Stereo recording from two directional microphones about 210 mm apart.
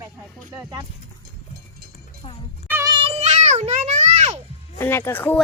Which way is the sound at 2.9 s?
25° right (ahead or behind).